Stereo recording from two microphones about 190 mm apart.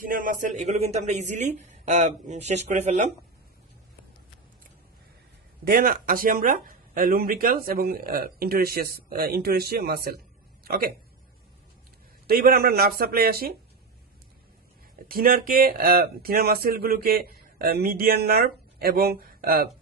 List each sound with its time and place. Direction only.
0.0 s a man's voice: 45° right (ahead or behind)
5.7 s speech: 50° right (ahead or behind)
12.3 s speech: 55° right (ahead or behind)
15.0 s speech: 50° right (ahead or behind)